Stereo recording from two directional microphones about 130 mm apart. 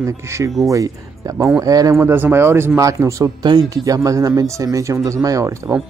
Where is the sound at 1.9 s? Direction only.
15° right (ahead or behind).